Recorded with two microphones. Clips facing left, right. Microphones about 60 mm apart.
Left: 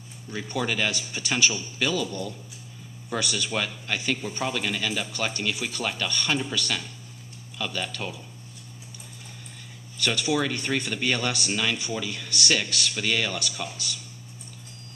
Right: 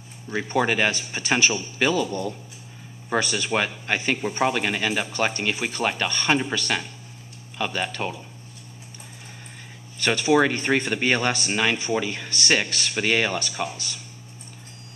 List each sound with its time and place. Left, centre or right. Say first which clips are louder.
0.3 s speech: right 6 dB; right
9.9 s speech: right 6 dB; right